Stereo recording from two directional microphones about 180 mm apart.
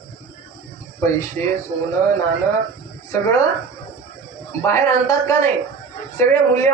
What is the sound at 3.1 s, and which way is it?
Speech, 15° left (ahead or behind).